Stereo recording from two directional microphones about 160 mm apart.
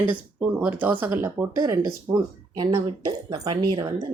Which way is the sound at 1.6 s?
25° right (ahead or behind).